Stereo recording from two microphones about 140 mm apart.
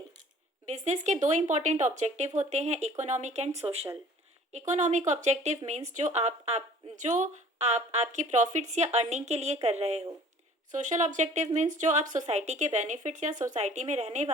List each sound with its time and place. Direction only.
0.6 s speech: 55° right (ahead or behind)
10.7 s speech: 65° right (ahead or behind)